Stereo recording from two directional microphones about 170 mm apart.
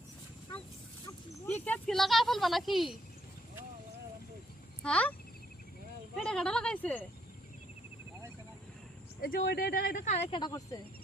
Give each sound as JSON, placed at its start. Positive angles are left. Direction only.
{"t": 1.5, "sound": "a sound", "side_deg": 10}
{"t": 4.8, "sound": "speech", "side_deg": 5}
{"t": 6.2, "sound": "speech", "side_deg": 5}
{"t": 9.2, "sound": "speech", "side_deg": 65}
{"t": 9.9, "sound": "speech", "side_deg": 45}
{"t": 10.3, "sound": "speech", "side_deg": 25}